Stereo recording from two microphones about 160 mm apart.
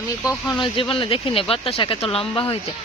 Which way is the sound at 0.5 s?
30° left (ahead or behind).